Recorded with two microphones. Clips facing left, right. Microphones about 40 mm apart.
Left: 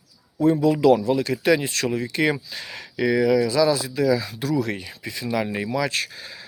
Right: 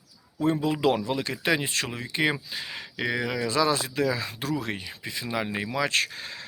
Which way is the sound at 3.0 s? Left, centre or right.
Right.